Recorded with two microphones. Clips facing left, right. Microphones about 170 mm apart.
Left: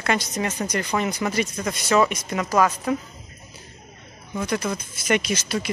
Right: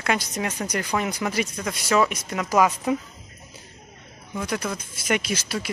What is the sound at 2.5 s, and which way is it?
Speech, 10° right (ahead or behind).